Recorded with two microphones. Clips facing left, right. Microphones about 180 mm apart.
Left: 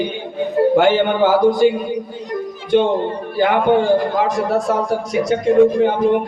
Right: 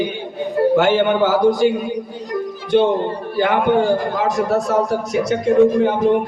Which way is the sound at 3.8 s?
45° right (ahead or behind).